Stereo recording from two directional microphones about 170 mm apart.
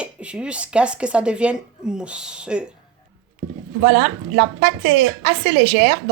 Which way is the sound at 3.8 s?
85° right.